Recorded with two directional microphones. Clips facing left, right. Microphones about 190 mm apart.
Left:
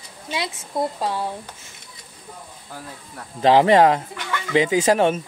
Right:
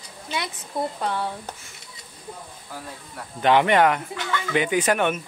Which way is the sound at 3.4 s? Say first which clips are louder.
Left 4 dB; 30° left (ahead or behind).